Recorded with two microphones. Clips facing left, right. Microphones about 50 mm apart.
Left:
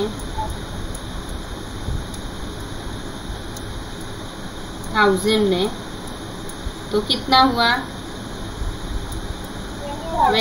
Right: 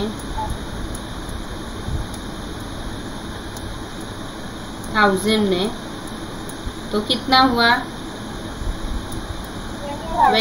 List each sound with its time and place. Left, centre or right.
4.9 s a woman's voice: centre
6.9 s a woman's voice: centre
10.2 s a sound: centre